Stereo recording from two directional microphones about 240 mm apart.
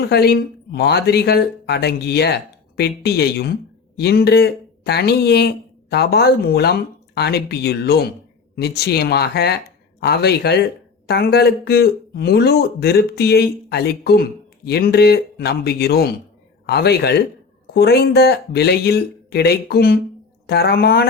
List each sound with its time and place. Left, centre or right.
0.0 s speech: left